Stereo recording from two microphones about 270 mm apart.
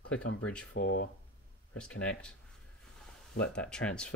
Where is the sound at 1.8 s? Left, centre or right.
Centre.